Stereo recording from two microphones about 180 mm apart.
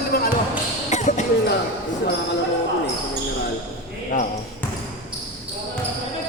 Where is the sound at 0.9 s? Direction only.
40° left (ahead or behind).